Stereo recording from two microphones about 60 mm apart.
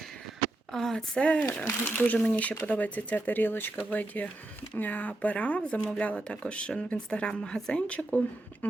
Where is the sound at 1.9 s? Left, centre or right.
Left.